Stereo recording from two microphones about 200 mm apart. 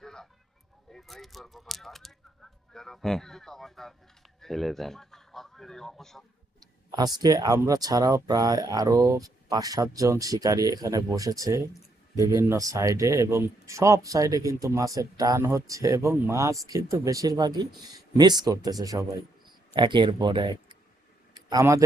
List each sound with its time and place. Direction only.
0.0 s a sound: 5° left (ahead or behind)
0.9 s a man's voice: centre (ahead or behind)
6.6 s speech: 20° right (ahead or behind)